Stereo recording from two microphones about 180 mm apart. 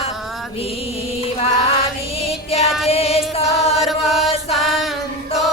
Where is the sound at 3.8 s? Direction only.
Centre (ahead or behind).